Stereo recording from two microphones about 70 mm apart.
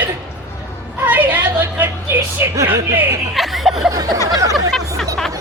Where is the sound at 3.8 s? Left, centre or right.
Right.